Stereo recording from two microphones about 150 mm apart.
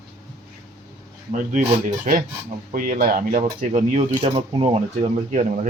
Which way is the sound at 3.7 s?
55° right (ahead or behind).